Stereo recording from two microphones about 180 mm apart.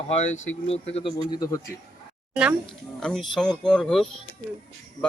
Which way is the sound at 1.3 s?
20° left (ahead or behind).